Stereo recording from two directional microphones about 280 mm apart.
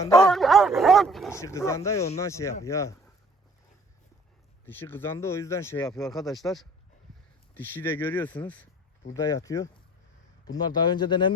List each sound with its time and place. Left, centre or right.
0.0 s speech: centre
0.3 s a sound: centre
1.4 s speech: centre
4.6 s speech: centre